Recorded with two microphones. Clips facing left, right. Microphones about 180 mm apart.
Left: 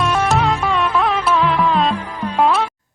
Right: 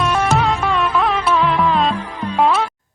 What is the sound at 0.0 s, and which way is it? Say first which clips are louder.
Music: even; centre (ahead or behind).